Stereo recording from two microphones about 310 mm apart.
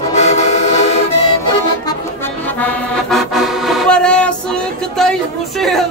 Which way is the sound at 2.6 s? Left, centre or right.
Centre.